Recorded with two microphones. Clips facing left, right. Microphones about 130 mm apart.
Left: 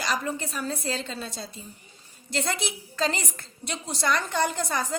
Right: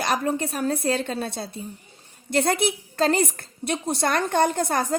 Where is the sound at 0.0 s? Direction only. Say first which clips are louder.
Right 5 dB; 55° right (ahead or behind).